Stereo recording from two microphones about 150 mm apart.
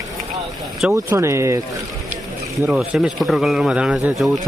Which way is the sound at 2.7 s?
5° right (ahead or behind).